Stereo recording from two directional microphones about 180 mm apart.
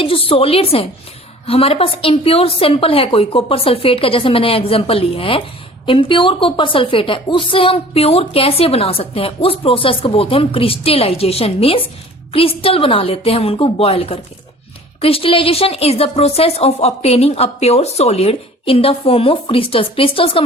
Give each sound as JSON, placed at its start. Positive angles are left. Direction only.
{"t": 0.0, "sound": "a woman's voice", "side_deg": 30}